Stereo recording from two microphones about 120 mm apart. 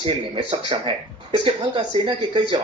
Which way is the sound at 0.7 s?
45° right (ahead or behind).